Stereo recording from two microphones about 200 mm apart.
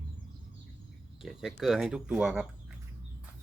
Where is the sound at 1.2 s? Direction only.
Centre (ahead or behind).